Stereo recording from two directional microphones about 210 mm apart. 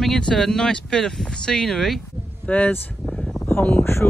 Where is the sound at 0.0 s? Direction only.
5° left (ahead or behind).